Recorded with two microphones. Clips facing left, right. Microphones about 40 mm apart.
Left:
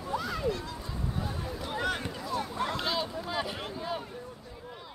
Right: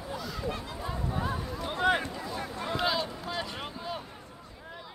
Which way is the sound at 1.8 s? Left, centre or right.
Right.